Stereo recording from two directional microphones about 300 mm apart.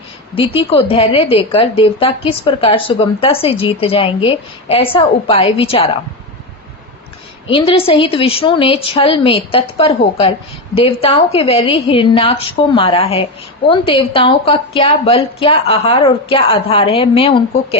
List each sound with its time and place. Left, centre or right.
0.3 s a woman's voice: centre
7.5 s a woman's voice: centre